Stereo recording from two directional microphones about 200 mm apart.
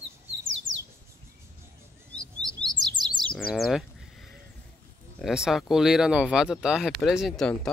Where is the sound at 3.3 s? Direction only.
Centre (ahead or behind).